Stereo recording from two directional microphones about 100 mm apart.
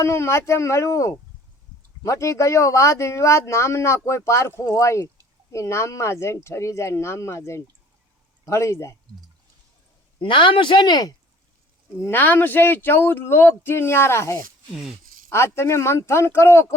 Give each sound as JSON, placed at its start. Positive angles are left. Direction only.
{"t": 0.0, "sound": "speech", "side_deg": 25}
{"t": 10.2, "sound": "speech", "side_deg": 55}
{"t": 12.1, "sound": "speech", "side_deg": 20}